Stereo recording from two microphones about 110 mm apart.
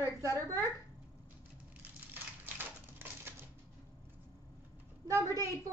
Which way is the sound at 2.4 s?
20° right (ahead or behind).